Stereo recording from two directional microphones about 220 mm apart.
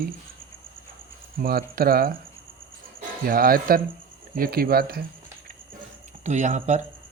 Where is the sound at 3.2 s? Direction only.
40° right (ahead or behind).